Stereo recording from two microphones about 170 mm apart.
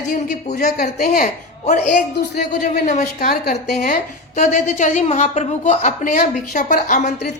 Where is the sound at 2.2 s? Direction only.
80° left.